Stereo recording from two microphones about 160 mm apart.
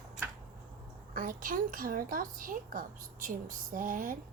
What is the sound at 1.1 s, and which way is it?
A child's voice, 55° right (ahead or behind).